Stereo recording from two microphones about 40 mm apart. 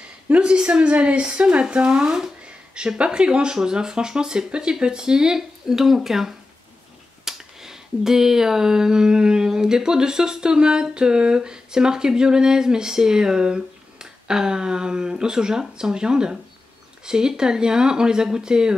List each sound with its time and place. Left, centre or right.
0.3 s speech: right